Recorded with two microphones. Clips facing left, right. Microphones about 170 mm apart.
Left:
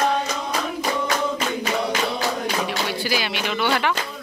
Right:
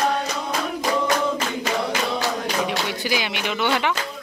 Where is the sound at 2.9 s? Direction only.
20° right (ahead or behind).